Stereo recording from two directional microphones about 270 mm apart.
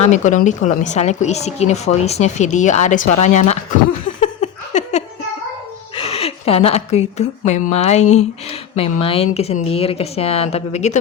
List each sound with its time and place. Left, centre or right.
0.0 s speech: left
4.7 s a sound: left
6.0 s a woman's voice: left